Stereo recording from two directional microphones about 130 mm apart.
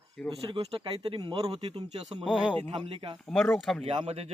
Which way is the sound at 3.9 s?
45° right (ahead or behind).